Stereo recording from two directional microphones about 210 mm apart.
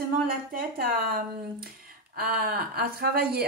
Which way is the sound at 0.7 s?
45° right (ahead or behind).